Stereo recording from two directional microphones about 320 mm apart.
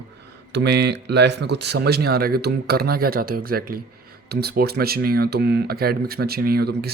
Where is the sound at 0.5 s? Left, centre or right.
Right.